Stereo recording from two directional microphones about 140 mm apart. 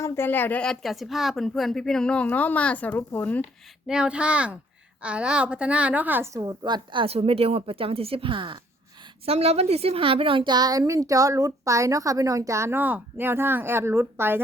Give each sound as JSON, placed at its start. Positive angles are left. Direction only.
{"t": 0.0, "sound": "a woman's voice", "side_deg": 15}
{"t": 3.8, "sound": "a woman's voice", "side_deg": -5}
{"t": 6.4, "sound": "a woman's voice", "side_deg": -25}